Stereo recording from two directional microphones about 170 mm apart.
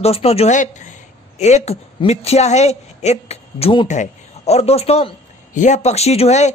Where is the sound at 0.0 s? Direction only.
35° left (ahead or behind).